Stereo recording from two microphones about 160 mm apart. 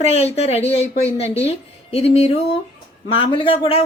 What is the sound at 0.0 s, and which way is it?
A woman's voice, 40° left (ahead or behind).